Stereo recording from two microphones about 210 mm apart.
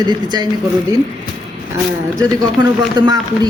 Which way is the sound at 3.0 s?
20° right (ahead or behind).